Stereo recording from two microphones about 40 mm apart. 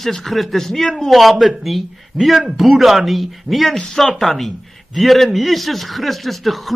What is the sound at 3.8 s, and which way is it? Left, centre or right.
A man's voice, centre.